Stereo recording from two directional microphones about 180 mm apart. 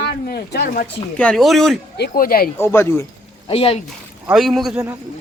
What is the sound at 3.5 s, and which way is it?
Speech, 30° left (ahead or behind).